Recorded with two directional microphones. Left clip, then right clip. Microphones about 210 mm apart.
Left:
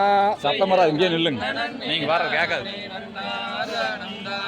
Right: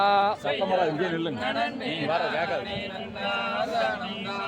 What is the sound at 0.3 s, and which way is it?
Speech, 40° left (ahead or behind).